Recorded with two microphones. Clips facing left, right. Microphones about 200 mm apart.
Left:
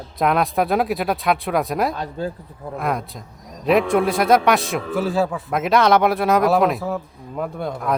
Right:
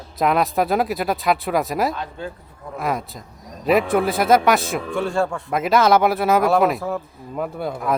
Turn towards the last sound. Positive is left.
turn(degrees=-5)  # may be behind; listen again after turning